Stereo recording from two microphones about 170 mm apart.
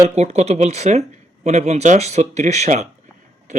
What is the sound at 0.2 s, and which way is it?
Speech, 40° right (ahead or behind).